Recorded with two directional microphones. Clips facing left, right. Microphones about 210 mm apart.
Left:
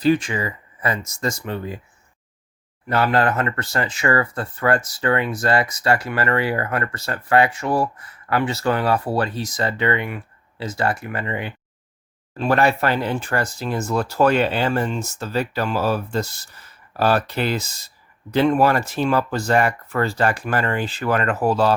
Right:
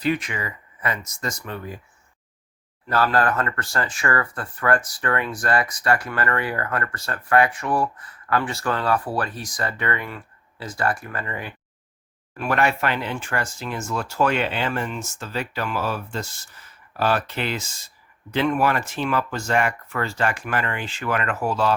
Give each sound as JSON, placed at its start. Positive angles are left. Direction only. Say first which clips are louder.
{"t": 0.0, "sound": "speech", "louder": "left 6 dB", "side_deg": 30}
{"t": 2.9, "sound": "speech", "louder": "left 2 dB", "side_deg": 25}